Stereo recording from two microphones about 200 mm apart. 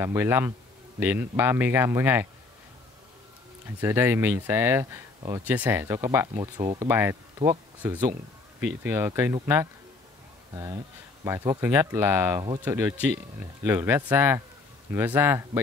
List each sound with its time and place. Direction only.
0.0 s speech: 10° right (ahead or behind)
3.8 s speech: 10° right (ahead or behind)